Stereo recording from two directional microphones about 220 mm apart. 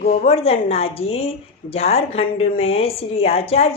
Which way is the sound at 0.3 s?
25° left (ahead or behind).